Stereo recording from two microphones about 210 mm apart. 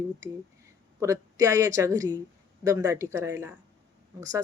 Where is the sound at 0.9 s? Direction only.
15° right (ahead or behind).